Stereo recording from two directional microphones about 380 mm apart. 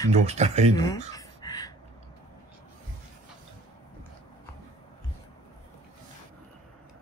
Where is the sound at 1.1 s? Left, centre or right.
Centre.